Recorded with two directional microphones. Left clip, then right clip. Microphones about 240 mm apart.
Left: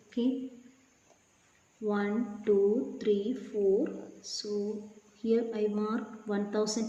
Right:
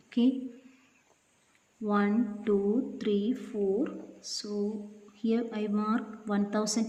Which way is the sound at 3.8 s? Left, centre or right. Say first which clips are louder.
Even; right.